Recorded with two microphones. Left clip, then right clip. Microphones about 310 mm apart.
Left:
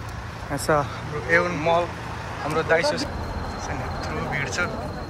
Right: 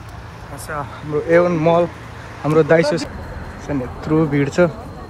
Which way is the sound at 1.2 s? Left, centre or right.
Centre.